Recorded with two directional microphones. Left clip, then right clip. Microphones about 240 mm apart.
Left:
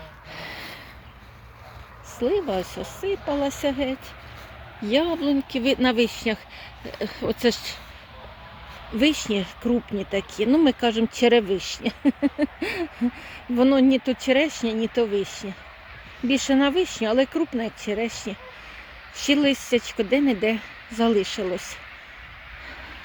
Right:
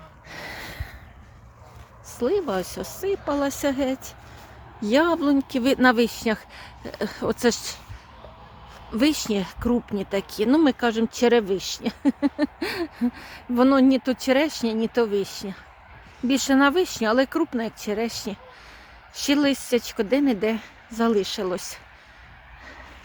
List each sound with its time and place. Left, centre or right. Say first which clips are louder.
0.3 s gasp: even; centre
2.1 s speech: even; centre
9.0 s speech: left 1 dB; centre